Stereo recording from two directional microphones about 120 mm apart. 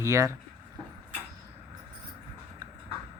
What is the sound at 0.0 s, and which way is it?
Speech, 25° right (ahead or behind).